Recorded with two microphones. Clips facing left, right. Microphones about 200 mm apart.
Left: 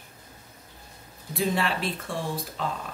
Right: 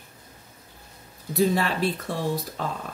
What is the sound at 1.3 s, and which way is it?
Speech, 40° right (ahead or behind).